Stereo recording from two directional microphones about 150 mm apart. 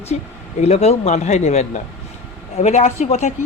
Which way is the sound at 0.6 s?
45° left (ahead or behind).